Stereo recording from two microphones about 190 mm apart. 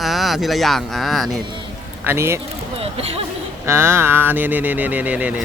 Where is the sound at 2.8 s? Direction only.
30° right (ahead or behind).